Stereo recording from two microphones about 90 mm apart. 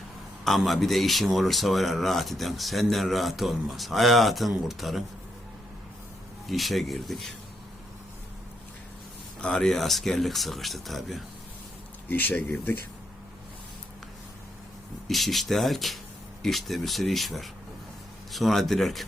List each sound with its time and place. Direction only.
0.4 s speech: centre (ahead or behind)
6.5 s speech: centre (ahead or behind)
9.4 s speech: 10° left (ahead or behind)
12.0 s speech: 20° left (ahead or behind)
15.0 s speech: centre (ahead or behind)